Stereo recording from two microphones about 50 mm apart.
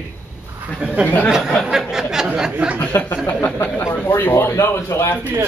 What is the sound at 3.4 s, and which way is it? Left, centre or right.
Speech, left.